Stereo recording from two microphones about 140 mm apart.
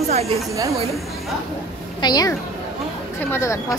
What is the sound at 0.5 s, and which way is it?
Speech, 20° right (ahead or behind).